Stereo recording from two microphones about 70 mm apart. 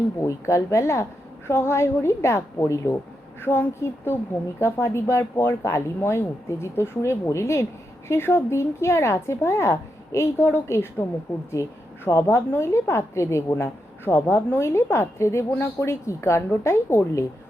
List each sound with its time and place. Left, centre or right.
0.2 s a woman's voice: left
3.4 s speech: left
11.6 s a woman's voice: left